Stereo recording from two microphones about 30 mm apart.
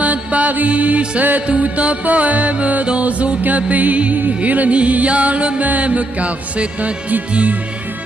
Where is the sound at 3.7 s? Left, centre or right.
Right.